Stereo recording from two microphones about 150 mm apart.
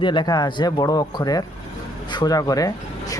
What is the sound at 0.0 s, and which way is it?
A man's voice, 30° left (ahead or behind).